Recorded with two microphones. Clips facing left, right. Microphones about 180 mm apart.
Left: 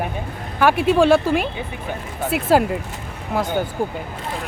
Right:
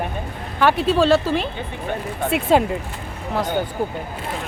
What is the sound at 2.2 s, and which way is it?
Speech, centre (ahead or behind).